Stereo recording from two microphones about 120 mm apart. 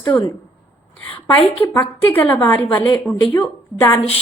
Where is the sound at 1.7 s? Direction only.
15° left (ahead or behind).